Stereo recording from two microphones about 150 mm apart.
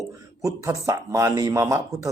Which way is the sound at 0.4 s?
20° right (ahead or behind).